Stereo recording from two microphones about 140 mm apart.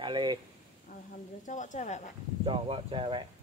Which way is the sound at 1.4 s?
60° left (ahead or behind).